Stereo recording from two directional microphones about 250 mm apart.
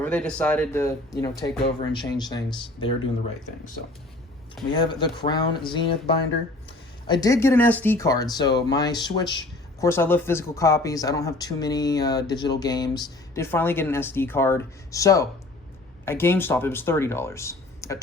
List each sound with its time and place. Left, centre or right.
0.0 s speech: centre
4.7 s speech: centre